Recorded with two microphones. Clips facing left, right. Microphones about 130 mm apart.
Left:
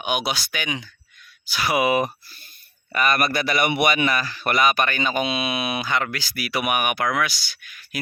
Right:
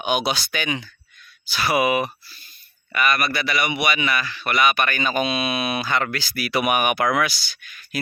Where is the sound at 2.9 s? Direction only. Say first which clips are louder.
Left 1 dB; 40° left (ahead or behind); by 7.3 s 5° right (ahead or behind).